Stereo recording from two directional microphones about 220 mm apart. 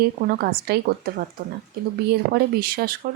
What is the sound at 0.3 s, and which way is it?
Speech, 45° right (ahead or behind).